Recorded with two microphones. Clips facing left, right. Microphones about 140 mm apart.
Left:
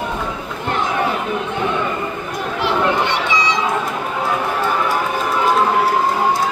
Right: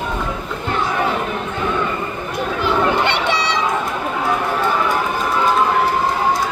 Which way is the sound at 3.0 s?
70° right (ahead or behind).